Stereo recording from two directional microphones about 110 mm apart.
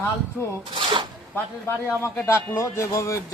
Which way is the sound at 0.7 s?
50° right (ahead or behind).